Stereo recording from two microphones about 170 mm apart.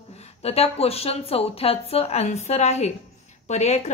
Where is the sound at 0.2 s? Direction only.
35° left (ahead or behind).